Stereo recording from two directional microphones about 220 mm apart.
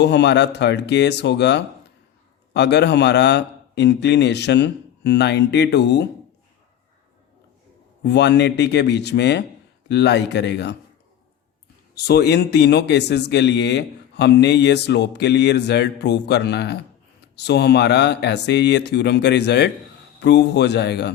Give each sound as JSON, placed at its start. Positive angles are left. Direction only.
{"t": 0.0, "sound": "speech", "side_deg": 50}
{"t": 8.0, "sound": "speech", "side_deg": 50}
{"t": 11.9, "sound": "speech", "side_deg": 45}